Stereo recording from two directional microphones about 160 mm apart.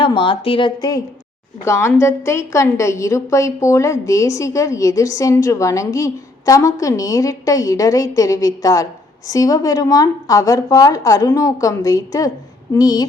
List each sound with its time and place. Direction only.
0.0 s a woman's voice: 30° left (ahead or behind)
0.8 s a woman's voice: 20° left (ahead or behind)